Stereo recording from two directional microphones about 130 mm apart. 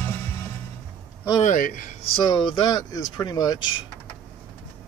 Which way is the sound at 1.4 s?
90° left.